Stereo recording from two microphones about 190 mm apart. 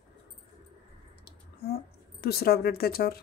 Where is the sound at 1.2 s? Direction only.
55° left (ahead or behind).